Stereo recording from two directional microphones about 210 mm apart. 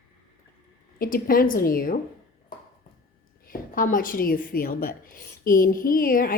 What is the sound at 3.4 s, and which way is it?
A woman's voice, 40° left (ahead or behind).